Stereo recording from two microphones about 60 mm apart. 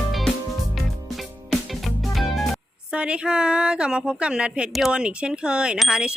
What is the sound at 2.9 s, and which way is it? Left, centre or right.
Speech, centre.